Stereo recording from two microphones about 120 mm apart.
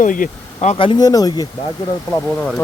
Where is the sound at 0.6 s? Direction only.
70° left (ahead or behind).